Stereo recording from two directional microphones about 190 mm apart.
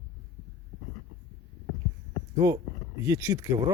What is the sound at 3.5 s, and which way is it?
Speech, 20° right (ahead or behind).